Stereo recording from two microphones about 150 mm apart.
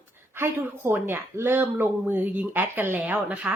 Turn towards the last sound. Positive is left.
turn(degrees=-10)  # may be behind; listen again after turning